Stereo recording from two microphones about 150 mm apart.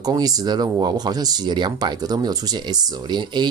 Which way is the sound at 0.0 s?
25° right (ahead or behind).